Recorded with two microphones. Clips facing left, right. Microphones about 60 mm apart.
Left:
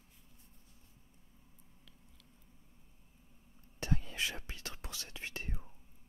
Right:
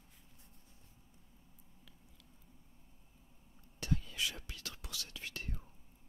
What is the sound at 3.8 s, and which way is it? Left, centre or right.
Whispering, left.